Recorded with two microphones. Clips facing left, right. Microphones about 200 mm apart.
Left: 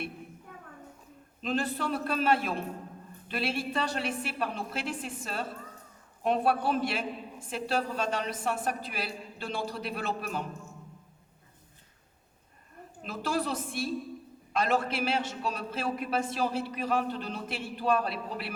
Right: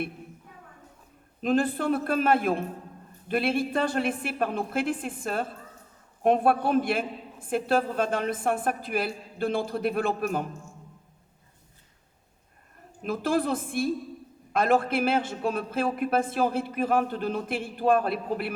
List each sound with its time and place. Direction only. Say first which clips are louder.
1.4 s a man's voice: right 6 dB; 50° right (ahead or behind)
13.0 s a man's voice: right 6 dB; 50° right (ahead or behind)